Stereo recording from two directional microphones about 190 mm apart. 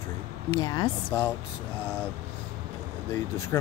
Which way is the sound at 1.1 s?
10° left (ahead or behind).